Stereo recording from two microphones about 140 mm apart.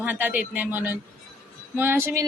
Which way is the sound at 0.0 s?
10° right (ahead or behind).